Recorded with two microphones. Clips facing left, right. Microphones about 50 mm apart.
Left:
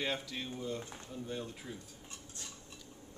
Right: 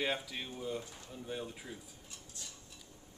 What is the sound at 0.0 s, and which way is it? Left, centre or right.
Speech, centre.